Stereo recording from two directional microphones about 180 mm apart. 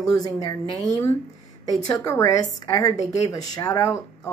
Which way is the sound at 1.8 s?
20° left (ahead or behind).